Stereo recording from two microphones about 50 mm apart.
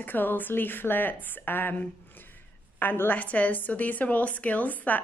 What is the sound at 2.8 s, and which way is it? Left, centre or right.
A woman's voice, left.